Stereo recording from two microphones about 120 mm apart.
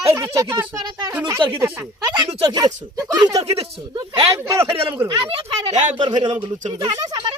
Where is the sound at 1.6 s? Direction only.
30° right (ahead or behind).